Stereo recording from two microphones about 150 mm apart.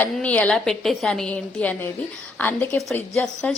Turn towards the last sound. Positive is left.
turn(degrees=5)  # may be behind; listen again after turning